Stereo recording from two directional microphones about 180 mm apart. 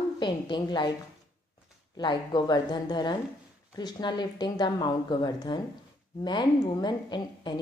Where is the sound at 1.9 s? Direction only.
25° left (ahead or behind).